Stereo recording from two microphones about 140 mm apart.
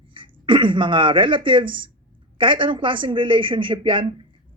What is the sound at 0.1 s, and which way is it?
Speech, 35° right (ahead or behind).